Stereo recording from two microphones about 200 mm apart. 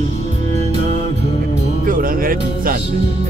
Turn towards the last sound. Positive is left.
turn(degrees=-45)  # may be behind; listen again after turning